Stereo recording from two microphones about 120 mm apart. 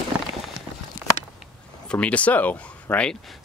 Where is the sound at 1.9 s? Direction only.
10° left (ahead or behind).